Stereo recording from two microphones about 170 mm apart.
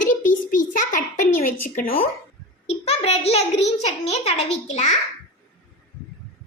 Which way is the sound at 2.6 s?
40° left (ahead or behind).